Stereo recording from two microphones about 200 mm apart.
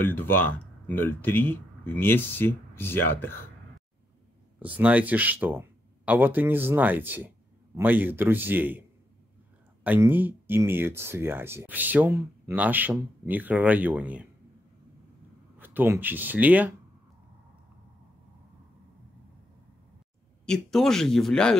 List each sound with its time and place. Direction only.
0.1 s speech: 10° left (ahead or behind)
4.6 s speech: 10° right (ahead or behind)
9.8 s speech: 10° right (ahead or behind)
15.6 s speech: 10° right (ahead or behind)
20.4 s speech: centre (ahead or behind)